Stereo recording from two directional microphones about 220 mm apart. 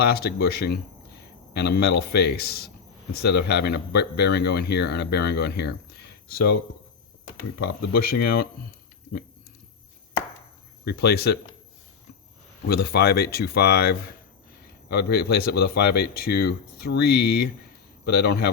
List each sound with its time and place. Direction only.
0.0 s a man's voice: 45° left (ahead or behind)
7.6 s a man's voice: 45° left (ahead or behind)
10.8 s a man's voice: 45° left (ahead or behind)
12.6 s a man's voice: 45° left (ahead or behind)